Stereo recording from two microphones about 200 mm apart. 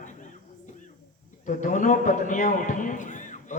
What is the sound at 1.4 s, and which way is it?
A man's voice, 40° left (ahead or behind).